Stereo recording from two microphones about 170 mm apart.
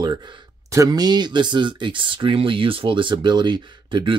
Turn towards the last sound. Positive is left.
turn(degrees=-30)  # may be behind; listen again after turning